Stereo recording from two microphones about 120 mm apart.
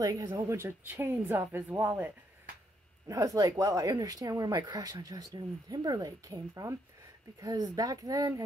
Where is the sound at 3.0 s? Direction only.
30° right (ahead or behind).